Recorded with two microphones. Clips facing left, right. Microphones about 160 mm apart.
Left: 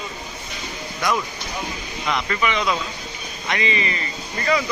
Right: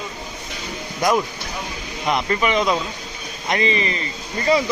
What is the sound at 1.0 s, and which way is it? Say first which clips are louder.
Speech: right 4 dB; 45° right (ahead or behind).